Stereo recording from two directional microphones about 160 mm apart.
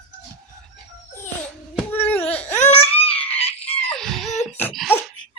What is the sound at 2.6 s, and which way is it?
Laughter, 45° left (ahead or behind).